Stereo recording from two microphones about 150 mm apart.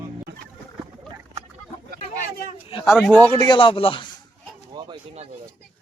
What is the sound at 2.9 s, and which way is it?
Speech, 5° left (ahead or behind).